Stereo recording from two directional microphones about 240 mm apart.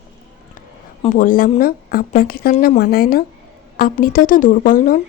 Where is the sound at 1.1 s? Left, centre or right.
Left.